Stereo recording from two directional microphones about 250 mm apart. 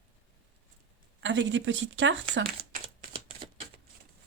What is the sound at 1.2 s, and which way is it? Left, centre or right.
Speech, right.